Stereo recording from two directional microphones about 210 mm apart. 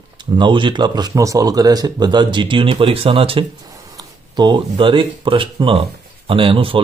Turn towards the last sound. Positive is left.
turn(degrees=-25)  # may be behind; listen again after turning